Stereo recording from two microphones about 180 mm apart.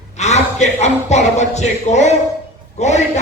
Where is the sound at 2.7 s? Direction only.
40° left (ahead or behind).